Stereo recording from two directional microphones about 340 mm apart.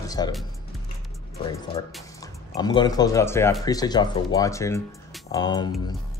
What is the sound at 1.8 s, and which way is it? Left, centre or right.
Speech, centre.